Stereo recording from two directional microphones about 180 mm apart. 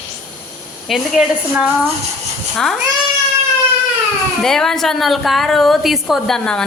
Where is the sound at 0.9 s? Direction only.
5° right (ahead or behind).